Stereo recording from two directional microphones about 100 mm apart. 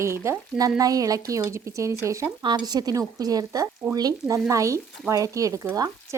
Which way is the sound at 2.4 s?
50° right (ahead or behind).